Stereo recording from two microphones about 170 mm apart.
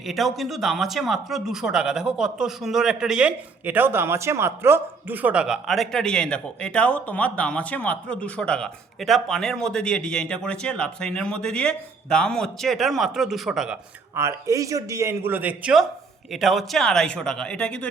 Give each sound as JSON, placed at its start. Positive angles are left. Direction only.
{"t": 0.0, "sound": "speech", "side_deg": 0}
{"t": 14.2, "sound": "a man's voice", "side_deg": -15}